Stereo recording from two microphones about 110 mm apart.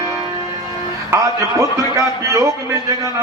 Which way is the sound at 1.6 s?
30° right (ahead or behind).